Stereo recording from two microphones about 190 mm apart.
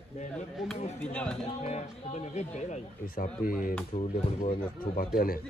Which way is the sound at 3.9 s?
35° left (ahead or behind).